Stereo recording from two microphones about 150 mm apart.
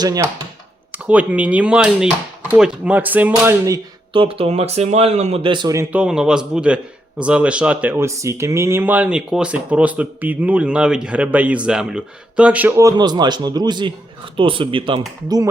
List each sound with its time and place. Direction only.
0.0 s speech: 25° right (ahead or behind)
0.9 s speech: 10° right (ahead or behind)
4.1 s speech: 35° right (ahead or behind)
5.7 s a man's voice: 10° right (ahead or behind); by 15.4 s 30° right (ahead or behind)